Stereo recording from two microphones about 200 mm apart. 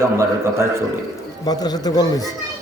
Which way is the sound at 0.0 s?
15° right (ahead or behind).